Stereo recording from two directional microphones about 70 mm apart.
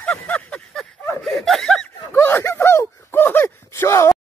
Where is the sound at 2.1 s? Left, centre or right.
Left.